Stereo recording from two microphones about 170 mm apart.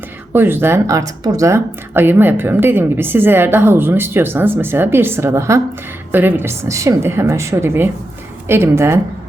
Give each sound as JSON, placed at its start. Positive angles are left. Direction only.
{"t": 0.3, "sound": "speech", "side_deg": -15}